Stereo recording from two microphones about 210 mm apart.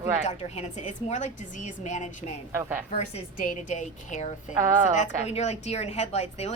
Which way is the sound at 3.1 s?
35° left (ahead or behind).